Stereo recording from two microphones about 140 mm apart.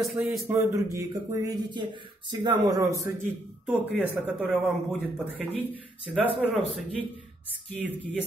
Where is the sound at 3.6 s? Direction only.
5° right (ahead or behind).